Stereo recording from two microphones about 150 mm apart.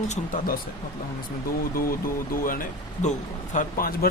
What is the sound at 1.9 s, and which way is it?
Speech, 70° left (ahead or behind).